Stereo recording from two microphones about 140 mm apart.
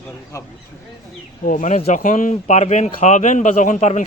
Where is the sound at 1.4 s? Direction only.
70° left (ahead or behind).